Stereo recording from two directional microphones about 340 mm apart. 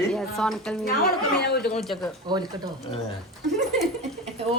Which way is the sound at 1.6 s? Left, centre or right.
Centre.